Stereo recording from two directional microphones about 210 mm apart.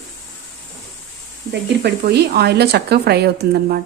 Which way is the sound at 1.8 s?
50° right (ahead or behind).